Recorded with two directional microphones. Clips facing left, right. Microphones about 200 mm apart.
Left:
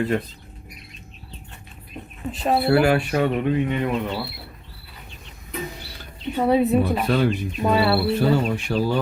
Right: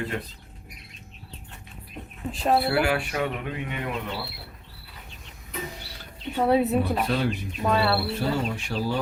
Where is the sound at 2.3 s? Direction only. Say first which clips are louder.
Left 1 dB; centre (ahead or behind).